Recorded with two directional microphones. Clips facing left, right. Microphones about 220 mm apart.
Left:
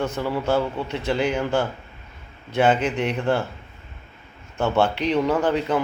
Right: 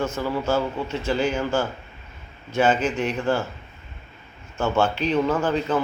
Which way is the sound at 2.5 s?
60° left (ahead or behind).